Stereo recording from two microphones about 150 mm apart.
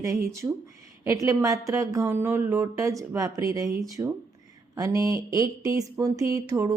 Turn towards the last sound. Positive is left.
turn(degrees=-20)  # may be behind; listen again after turning